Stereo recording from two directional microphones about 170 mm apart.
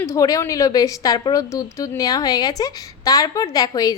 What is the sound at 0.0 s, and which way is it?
A woman's voice, 20° left (ahead or behind).